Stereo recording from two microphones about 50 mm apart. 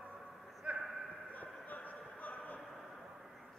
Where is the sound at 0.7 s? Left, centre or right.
Right.